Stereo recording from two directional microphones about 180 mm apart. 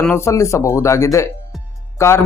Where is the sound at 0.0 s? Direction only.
15° left (ahead or behind).